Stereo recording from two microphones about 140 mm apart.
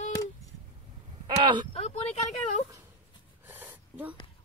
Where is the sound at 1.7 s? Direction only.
50° left (ahead or behind).